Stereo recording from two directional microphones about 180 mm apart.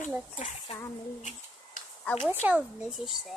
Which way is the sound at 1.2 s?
45° left (ahead or behind).